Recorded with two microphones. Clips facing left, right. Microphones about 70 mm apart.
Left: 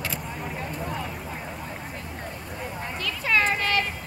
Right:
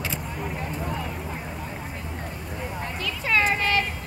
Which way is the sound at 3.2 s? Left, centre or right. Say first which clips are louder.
Right 1 dB; centre.